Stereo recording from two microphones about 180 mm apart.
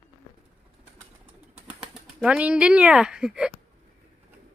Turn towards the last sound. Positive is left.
turn(degrees=-5)  # may be behind; listen again after turning